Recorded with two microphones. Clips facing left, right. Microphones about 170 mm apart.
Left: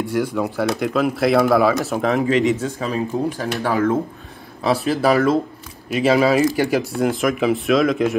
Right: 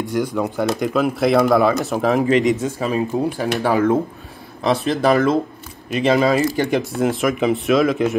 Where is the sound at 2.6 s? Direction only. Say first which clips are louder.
Right 2 dB; 15° right (ahead or behind).